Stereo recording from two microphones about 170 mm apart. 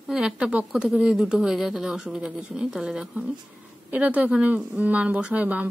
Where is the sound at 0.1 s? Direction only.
5° right (ahead or behind).